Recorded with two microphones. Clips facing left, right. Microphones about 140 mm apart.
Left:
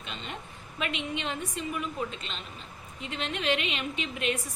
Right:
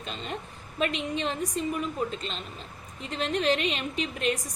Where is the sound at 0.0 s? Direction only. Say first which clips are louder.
Right 4 dB; 35° right (ahead or behind).